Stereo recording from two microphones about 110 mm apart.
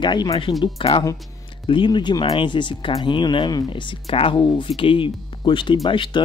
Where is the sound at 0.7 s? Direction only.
55° left (ahead or behind).